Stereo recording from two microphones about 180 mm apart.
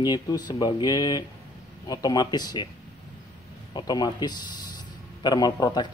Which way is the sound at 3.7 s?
20° left (ahead or behind).